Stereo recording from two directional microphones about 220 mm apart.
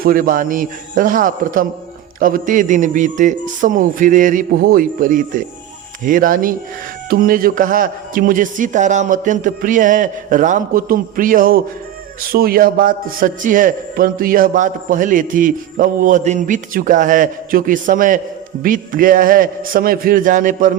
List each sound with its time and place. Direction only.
0.0 s a man's voice: 40° right (ahead or behind)